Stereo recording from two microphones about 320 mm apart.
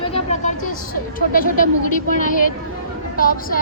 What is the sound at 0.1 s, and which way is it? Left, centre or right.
Vehicle, left.